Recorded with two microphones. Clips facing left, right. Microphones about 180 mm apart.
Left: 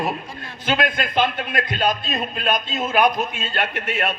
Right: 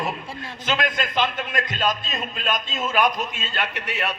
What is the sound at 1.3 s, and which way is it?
A man's voice, 45° left (ahead or behind).